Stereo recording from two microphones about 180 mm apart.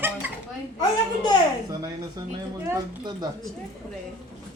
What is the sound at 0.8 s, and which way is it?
Speech, 20° left (ahead or behind).